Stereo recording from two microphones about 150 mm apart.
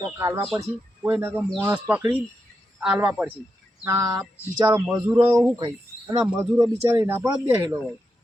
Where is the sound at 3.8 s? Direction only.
20° right (ahead or behind).